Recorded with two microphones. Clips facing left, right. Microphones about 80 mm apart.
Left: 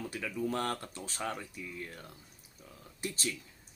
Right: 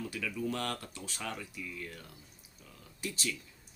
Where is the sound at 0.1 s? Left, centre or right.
Left.